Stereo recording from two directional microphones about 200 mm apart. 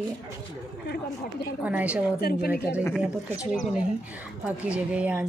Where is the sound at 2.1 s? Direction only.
50° left (ahead or behind).